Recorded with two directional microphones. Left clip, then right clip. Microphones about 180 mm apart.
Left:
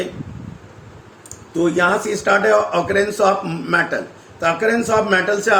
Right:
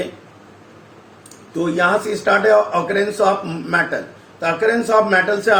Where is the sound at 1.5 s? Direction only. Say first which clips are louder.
Even; 45° left (ahead or behind).